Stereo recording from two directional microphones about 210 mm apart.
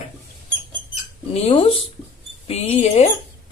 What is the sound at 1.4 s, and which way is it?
Speech, 25° left (ahead or behind).